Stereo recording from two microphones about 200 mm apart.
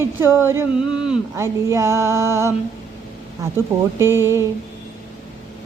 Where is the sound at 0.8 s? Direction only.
25° left (ahead or behind).